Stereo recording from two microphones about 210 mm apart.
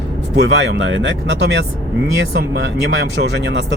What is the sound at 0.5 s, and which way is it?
Speech, 60° right (ahead or behind).